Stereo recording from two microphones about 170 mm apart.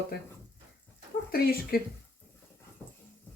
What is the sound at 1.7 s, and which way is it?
Speech, 60° left (ahead or behind).